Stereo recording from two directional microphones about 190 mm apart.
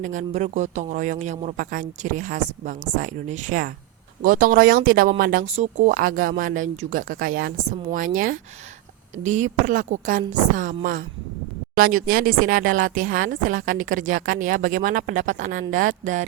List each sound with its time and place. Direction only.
0.0 s a woman's voice: 40° right (ahead or behind)
5.5 s a woman's voice: 35° right (ahead or behind)
12.0 s a woman's voice: 45° right (ahead or behind)